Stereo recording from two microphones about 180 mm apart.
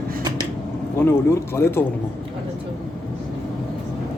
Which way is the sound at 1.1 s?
15° left (ahead or behind).